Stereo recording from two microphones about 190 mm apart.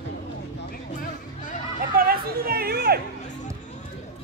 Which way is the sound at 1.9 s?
50° right (ahead or behind).